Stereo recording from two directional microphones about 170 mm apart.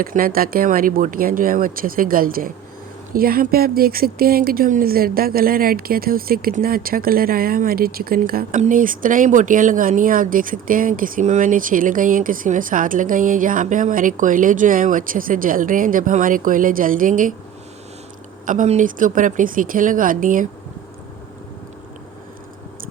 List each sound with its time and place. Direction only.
0.0 s speech: 55° right (ahead or behind)
18.4 s speech: 45° right (ahead or behind)